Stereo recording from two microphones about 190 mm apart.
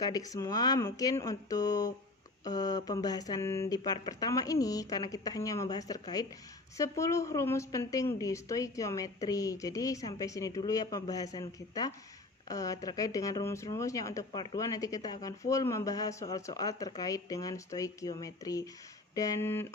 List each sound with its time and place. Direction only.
0.0 s a woman's voice: 20° left (ahead or behind)